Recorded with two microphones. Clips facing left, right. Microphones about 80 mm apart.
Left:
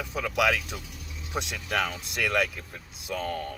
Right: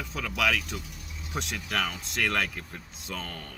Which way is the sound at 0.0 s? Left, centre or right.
Centre.